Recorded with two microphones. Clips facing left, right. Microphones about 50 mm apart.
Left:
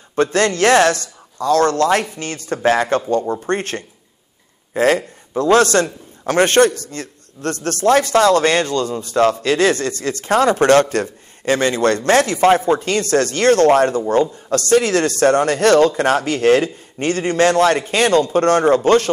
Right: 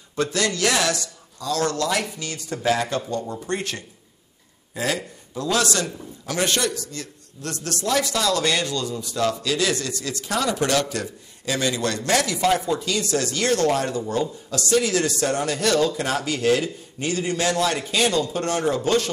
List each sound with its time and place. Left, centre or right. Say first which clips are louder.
0.1 s a man's voice: left 7 dB; left